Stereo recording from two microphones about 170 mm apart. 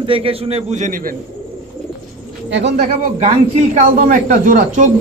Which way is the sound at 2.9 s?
40° right (ahead or behind).